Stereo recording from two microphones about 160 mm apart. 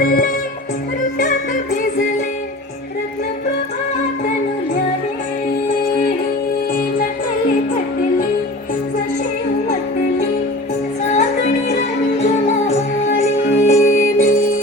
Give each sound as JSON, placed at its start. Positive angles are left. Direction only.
{"t": 0.0, "sound": "music", "side_deg": 60}
{"t": 11.1, "sound": "music", "side_deg": 45}